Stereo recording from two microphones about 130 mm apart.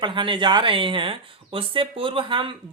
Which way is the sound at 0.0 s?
40° right (ahead or behind).